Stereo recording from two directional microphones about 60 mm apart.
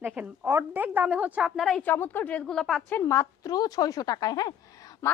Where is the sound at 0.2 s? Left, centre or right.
Right.